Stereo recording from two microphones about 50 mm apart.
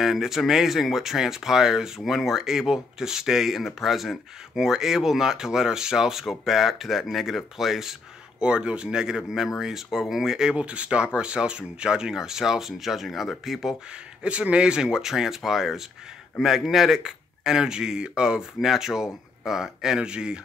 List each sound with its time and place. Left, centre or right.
0.0 s speech: centre
8.4 s speech: centre
10.6 s speech: right; by 13.7 s centre
14.2 s speech: right